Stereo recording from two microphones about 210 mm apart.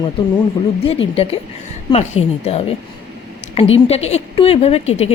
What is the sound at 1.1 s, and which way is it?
A woman's voice, 30° left (ahead or behind).